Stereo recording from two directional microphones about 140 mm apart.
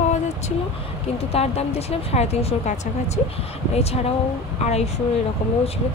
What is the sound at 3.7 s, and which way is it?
Speech, 45° left (ahead or behind).